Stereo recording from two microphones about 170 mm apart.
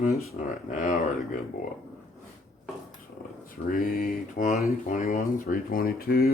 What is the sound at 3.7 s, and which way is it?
Speech, 60° left (ahead or behind).